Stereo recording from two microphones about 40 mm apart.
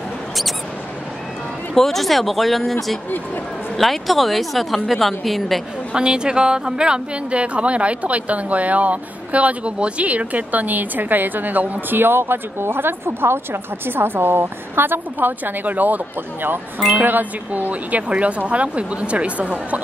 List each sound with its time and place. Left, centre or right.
1.8 s a woman's voice: centre
5.9 s speech: right
11.9 s speech: right
17.0 s speech: right